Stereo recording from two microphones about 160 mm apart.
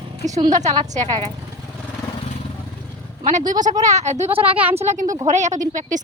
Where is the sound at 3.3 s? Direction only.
50° right (ahead or behind).